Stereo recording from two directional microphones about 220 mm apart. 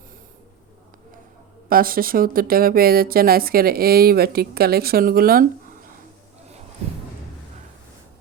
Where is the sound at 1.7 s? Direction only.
40° right (ahead or behind).